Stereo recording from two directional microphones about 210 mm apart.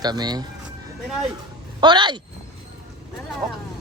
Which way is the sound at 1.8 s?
20° right (ahead or behind).